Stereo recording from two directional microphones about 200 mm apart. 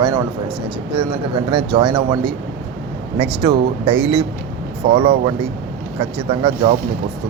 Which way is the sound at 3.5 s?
60° right (ahead or behind).